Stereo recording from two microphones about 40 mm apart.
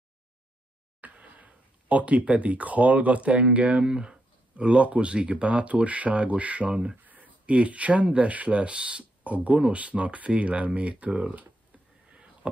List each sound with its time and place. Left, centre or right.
1.0 s speech: right
3.8 s speech: right
6.7 s speech: right
7.1 s a sound: right
7.5 s speech: right